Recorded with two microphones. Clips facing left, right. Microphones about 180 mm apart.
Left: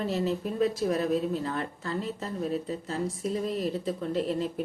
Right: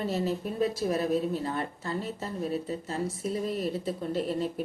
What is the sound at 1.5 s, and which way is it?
Speech, 30° right (ahead or behind).